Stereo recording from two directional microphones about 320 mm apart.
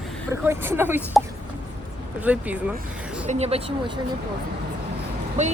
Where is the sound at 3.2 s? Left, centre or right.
Centre.